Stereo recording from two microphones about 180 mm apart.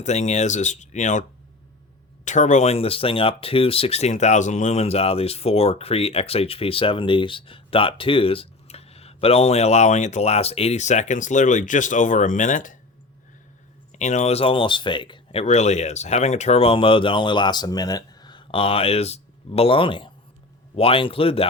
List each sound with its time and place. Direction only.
0.0 s speech: 40° left (ahead or behind)
2.2 s speech: 45° left (ahead or behind)
14.0 s speech: 40° left (ahead or behind)